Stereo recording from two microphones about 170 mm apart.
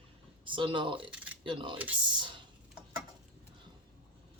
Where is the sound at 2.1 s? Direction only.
30° right (ahead or behind).